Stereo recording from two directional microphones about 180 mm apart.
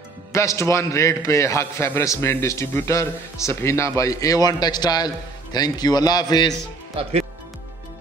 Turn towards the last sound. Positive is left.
turn(degrees=-35)  # may be behind; listen again after turning